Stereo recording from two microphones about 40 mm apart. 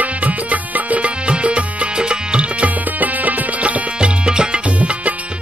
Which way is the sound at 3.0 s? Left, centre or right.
Right.